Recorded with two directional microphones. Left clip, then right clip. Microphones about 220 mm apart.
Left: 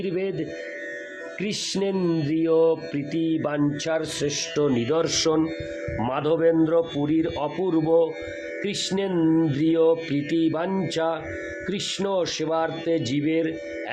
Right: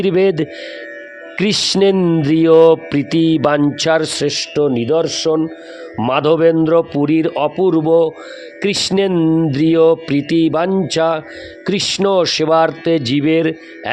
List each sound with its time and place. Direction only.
0.0 s speech: 50° right (ahead or behind); by 5.4 s 25° right (ahead or behind)
6.0 s speech: 40° right (ahead or behind)